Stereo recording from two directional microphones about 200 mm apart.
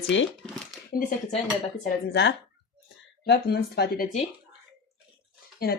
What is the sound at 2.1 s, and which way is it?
A woman's voice, 60° left (ahead or behind).